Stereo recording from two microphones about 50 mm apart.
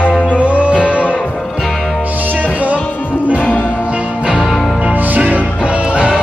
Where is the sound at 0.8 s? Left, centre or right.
Left.